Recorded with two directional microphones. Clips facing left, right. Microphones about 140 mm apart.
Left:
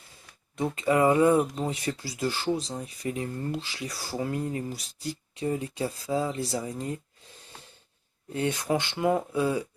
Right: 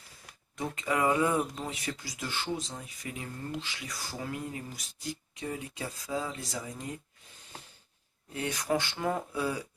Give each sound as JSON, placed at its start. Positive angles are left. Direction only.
{"t": 0.5, "sound": "speech", "side_deg": 25}
{"t": 8.3, "sound": "speech", "side_deg": 25}